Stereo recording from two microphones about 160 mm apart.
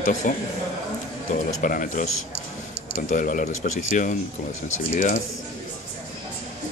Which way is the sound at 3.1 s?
55° left (ahead or behind).